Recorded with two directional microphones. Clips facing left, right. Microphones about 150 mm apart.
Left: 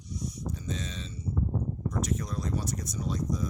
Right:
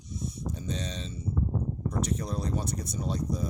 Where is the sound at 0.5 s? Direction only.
30° right (ahead or behind).